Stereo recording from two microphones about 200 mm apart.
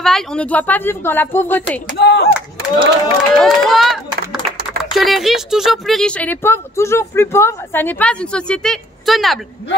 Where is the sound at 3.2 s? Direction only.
Centre (ahead or behind).